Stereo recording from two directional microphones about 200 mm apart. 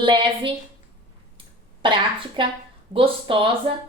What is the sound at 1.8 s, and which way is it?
A woman's voice, 25° right (ahead or behind).